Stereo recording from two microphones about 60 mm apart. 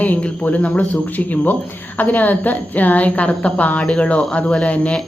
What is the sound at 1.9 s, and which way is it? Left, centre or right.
A woman's voice, left.